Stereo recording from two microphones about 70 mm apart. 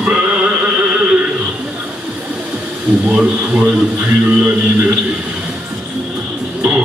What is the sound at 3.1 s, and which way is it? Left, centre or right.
Speech, centre.